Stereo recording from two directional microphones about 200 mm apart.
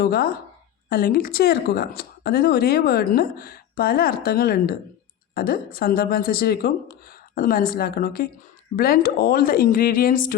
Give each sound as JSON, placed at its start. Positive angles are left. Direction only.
{"t": 0.0, "sound": "speech", "side_deg": 50}